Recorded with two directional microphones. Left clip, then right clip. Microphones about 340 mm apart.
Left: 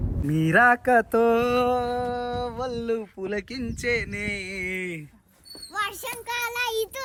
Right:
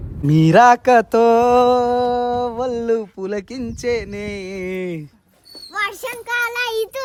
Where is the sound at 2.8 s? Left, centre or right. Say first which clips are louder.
Right 9 dB; left.